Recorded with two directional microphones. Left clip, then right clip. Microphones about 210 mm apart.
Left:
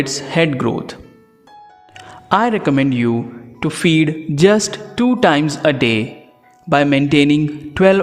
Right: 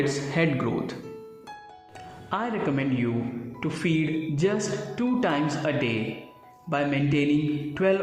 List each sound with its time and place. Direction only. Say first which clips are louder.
0.0 s speech: left 8 dB; 35° left (ahead or behind)
2.0 s a woman's voice: left 15 dB; 50° left (ahead or behind)